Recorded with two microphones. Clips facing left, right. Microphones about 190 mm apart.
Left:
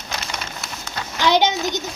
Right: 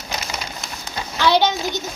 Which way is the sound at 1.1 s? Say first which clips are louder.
Even; 15° left (ahead or behind).